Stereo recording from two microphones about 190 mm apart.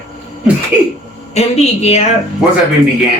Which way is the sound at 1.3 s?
35° left (ahead or behind).